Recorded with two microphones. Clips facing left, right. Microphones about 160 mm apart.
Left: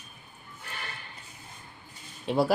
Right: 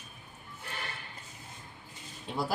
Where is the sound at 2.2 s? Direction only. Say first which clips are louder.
Left 9 dB; 75° left (ahead or behind).